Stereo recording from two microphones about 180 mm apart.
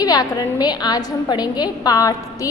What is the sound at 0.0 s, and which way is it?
A woman's voice, 20° left (ahead or behind).